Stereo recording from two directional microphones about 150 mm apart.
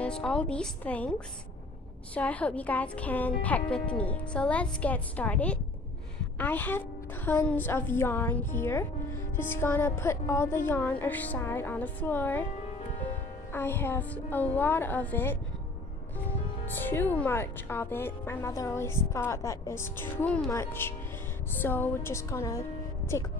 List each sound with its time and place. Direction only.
0.0 s speech: 5° left (ahead or behind)
2.1 s a woman's voice: 10° left (ahead or behind)
13.5 s speech: 15° left (ahead or behind)